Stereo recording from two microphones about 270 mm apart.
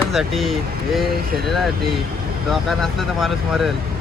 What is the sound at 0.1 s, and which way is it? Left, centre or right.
Speech, centre.